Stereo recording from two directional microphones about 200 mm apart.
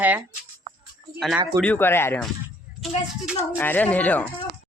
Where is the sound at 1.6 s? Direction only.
10° left (ahead or behind).